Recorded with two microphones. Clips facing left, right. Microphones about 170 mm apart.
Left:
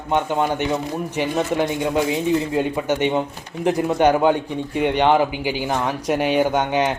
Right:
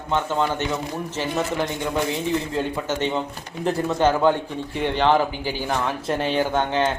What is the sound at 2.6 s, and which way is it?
Speech, 15° left (ahead or behind).